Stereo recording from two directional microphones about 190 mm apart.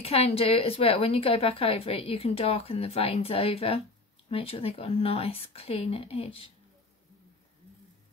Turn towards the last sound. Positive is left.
turn(degrees=30)  # may be behind; listen again after turning